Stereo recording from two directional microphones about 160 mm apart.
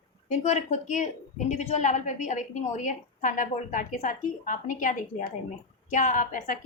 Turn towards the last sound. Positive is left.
turn(degrees=55)  # may be behind; listen again after turning